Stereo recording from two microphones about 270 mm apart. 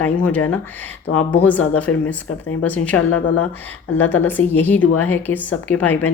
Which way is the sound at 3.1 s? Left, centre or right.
Left.